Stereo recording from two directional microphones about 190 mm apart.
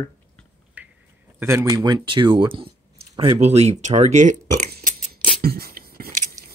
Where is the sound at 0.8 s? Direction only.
10° right (ahead or behind).